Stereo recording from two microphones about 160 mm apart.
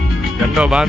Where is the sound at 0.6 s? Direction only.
5° right (ahead or behind).